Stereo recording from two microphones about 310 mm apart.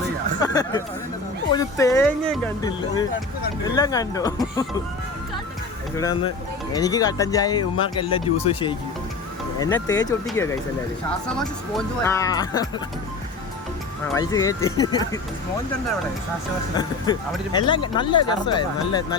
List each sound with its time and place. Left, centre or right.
0.3 s speech: centre
6.0 s speech: centre
14.1 s speech: centre
17.5 s speech: centre